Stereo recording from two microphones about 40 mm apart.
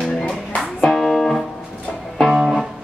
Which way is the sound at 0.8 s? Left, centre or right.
Centre.